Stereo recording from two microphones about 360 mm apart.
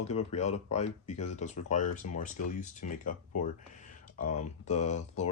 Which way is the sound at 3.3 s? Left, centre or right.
Left.